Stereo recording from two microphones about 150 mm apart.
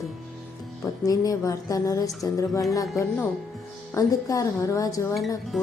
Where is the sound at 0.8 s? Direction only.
25° left (ahead or behind).